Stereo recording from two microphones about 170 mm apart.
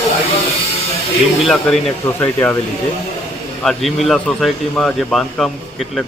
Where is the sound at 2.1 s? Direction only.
15° left (ahead or behind).